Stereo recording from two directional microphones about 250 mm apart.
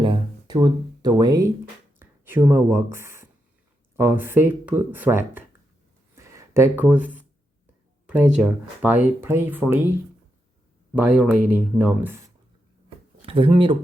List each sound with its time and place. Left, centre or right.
0.0 s a sound: centre
2.0 s speech: centre
6.1 s a sound: centre
8.1 s speech: centre
10.9 s speech: centre
13.2 s speech: centre